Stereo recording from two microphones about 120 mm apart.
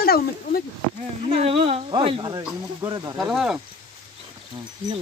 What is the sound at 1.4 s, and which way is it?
Speech, 55° right (ahead or behind).